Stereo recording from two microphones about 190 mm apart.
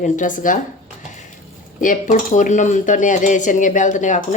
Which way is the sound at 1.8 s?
45° left (ahead or behind).